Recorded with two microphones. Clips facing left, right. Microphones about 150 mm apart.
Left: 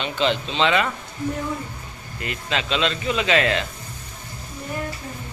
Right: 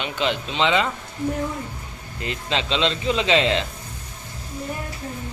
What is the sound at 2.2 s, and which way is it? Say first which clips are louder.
Speech: right 1 dB; 25° right (ahead or behind).